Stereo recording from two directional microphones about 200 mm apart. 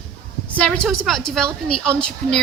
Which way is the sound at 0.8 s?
Centre (ahead or behind).